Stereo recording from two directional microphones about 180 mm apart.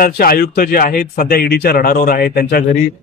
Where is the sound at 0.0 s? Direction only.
55° left (ahead or behind).